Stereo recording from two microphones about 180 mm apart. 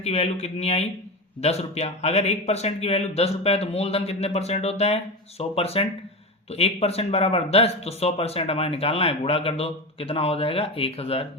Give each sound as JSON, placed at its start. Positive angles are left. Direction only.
{"t": 0.0, "sound": "speech", "side_deg": 35}